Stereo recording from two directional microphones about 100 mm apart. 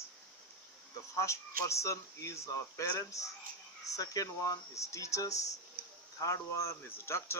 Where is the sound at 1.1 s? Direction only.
30° left (ahead or behind).